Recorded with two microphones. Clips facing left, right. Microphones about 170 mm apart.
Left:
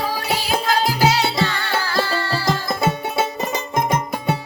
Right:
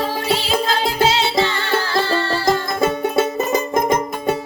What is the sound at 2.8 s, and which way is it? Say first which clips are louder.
Music: right 4 dB; 50° right (ahead or behind).